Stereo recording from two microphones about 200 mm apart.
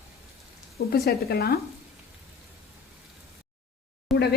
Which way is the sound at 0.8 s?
50° left (ahead or behind).